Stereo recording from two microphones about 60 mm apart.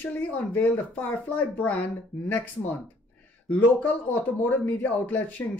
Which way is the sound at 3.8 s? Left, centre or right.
Left.